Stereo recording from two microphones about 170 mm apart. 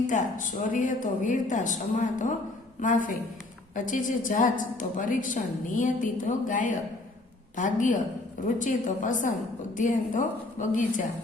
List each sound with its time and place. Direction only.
0.1 s a woman's voice: 50° left (ahead or behind)